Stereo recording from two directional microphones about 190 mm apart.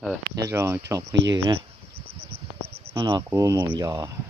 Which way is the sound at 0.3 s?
15° right (ahead or behind).